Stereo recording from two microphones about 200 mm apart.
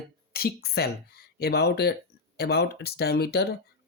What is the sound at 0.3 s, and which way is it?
Speech, 50° left (ahead or behind).